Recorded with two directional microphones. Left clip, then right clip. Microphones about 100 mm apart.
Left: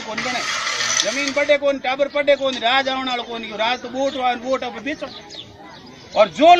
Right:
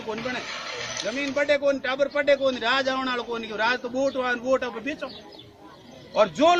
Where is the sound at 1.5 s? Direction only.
40° right (ahead or behind).